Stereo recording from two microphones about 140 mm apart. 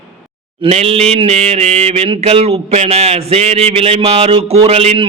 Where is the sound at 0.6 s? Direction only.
45° right (ahead or behind).